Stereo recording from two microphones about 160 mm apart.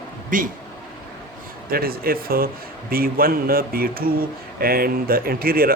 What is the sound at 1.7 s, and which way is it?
Speech, 70° right (ahead or behind).